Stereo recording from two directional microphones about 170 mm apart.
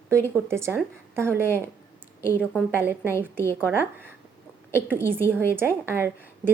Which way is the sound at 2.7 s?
10° right (ahead or behind).